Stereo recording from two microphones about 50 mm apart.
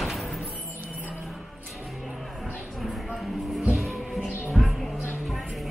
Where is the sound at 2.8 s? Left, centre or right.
Centre.